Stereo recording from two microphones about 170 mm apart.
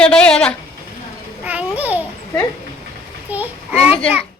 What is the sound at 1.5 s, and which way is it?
Babbling, 10° right (ahead or behind).